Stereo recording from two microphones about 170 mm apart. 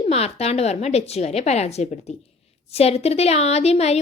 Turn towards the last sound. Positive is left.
turn(degrees=40)  # may be behind; listen again after turning